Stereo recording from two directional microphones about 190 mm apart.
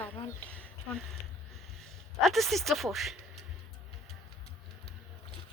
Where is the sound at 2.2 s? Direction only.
Centre (ahead or behind).